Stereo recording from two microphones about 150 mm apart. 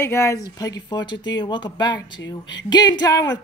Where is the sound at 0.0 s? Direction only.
20° left (ahead or behind).